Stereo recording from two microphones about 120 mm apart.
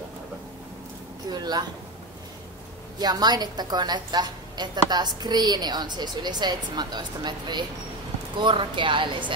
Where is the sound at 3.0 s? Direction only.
35° right (ahead or behind).